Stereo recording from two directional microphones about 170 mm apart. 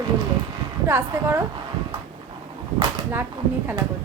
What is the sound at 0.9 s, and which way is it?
Speech, 15° right (ahead or behind).